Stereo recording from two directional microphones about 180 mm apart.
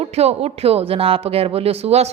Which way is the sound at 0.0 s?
35° right (ahead or behind).